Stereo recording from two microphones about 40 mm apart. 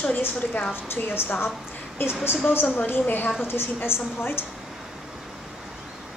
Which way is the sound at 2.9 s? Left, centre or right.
Left.